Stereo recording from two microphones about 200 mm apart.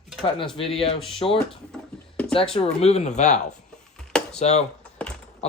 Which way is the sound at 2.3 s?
30° left (ahead or behind).